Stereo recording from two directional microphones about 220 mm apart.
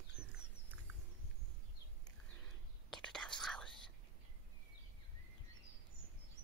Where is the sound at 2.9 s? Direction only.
5° left (ahead or behind).